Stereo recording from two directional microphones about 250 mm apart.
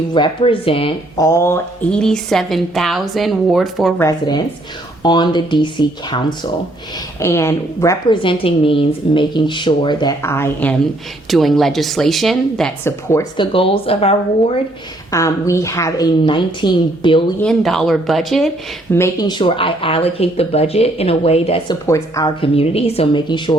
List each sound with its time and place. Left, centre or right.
0.1 s speech: centre
5.0 s a woman's voice: centre
15.1 s a woman's voice: centre
17.4 s speech: centre
18.9 s speech: centre
21.8 s speech: centre